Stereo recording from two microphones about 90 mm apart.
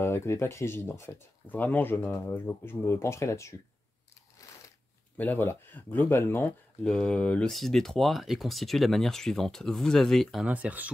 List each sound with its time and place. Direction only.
0.0 s speech: 30° left (ahead or behind)
5.1 s speech: 20° left (ahead or behind)
6.8 s speech: 10° left (ahead or behind)
7.4 s speech: 5° left (ahead or behind)
10.4 s speech: 15° right (ahead or behind)